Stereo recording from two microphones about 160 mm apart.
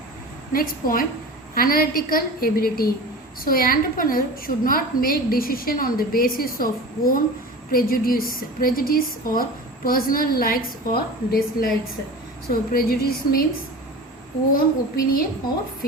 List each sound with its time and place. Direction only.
0.5 s a woman's voice: 60° left (ahead or behind)
12.7 s speech: 70° left (ahead or behind)
14.5 s a woman's voice: 65° left (ahead or behind)